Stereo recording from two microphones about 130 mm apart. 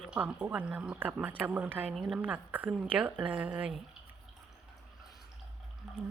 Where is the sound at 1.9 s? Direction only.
5° right (ahead or behind).